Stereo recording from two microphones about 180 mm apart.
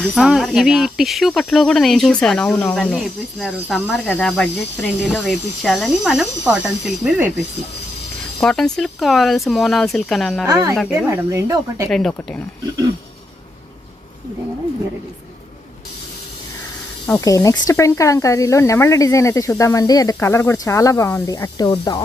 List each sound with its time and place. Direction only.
0.0 s speech: centre (ahead or behind)
8.4 s speech: 5° left (ahead or behind)
10.4 s speech: 15° right (ahead or behind)
11.9 s speech: centre (ahead or behind)
17.2 s speech: 20° left (ahead or behind)